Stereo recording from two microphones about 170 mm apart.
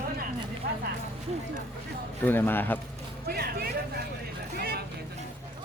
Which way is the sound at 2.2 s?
10° left (ahead or behind).